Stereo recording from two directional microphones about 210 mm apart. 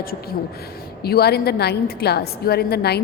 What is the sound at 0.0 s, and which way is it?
A woman's voice, 45° left (ahead or behind).